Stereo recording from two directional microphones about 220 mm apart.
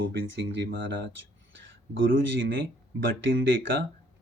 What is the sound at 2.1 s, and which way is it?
Speech, 60° right (ahead or behind).